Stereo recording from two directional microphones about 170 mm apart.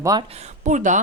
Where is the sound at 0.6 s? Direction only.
45° right (ahead or behind).